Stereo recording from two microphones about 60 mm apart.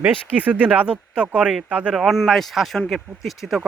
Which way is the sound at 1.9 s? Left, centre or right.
Centre.